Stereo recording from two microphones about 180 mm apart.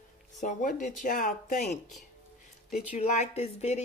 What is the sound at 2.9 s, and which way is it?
Speech, 40° left (ahead or behind).